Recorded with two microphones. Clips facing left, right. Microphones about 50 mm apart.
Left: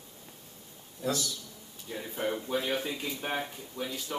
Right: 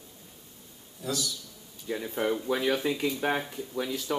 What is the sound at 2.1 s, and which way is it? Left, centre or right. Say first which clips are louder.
Speech: right 3 dB; right.